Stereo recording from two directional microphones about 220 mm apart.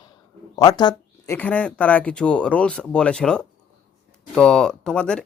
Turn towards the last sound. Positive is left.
turn(degrees=5)  # may be behind; listen again after turning